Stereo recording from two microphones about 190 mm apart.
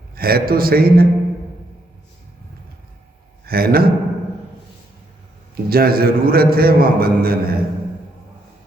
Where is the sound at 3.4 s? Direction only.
55° right (ahead or behind).